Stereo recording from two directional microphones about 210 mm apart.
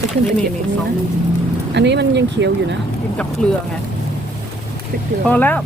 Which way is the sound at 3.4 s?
5° left (ahead or behind).